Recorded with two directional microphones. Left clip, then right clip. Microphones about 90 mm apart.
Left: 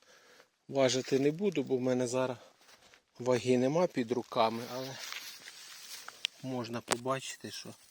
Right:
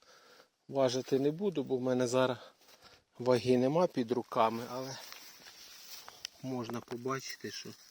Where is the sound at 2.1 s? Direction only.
50° right (ahead or behind).